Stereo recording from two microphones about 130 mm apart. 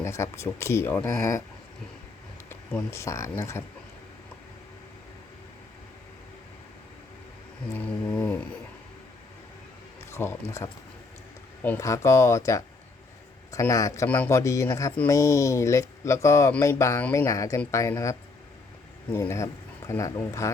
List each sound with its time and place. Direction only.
0.0 s speech: 20° left (ahead or behind)
2.5 s speech: 20° left (ahead or behind)
7.7 s mantra: 10° left (ahead or behind)
10.1 s speech: 20° left (ahead or behind)
11.8 s speech: 25° left (ahead or behind)